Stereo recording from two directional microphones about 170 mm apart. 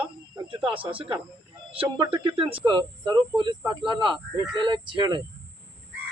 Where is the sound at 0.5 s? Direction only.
30° right (ahead or behind).